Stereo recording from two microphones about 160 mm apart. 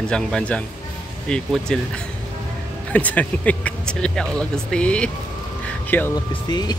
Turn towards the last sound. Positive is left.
turn(degrees=25)  # may be behind; listen again after turning